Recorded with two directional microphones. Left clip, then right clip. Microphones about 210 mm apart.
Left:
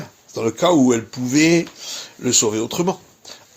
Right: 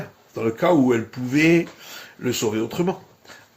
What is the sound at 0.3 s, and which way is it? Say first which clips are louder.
A man's voice: left 3 dB; 25° left (ahead or behind).